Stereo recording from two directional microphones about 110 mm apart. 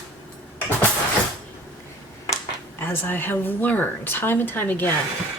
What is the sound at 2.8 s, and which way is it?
A woman's voice, 20° left (ahead or behind).